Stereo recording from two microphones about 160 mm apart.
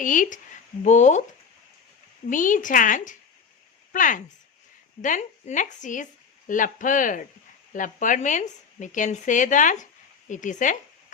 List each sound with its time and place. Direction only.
0.0 s speech: 55° left (ahead or behind)
2.3 s speech: 55° left (ahead or behind)